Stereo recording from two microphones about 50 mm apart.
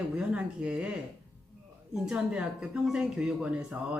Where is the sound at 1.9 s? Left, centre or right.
Centre.